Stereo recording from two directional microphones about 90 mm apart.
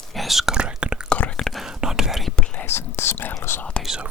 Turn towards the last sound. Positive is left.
turn(degrees=-5)  # may be behind; listen again after turning